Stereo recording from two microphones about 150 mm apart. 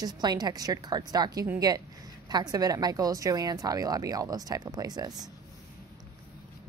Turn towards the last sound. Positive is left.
turn(degrees=-25)  # may be behind; listen again after turning